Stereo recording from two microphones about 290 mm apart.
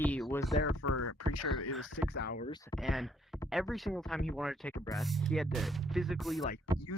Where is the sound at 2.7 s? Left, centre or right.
Centre.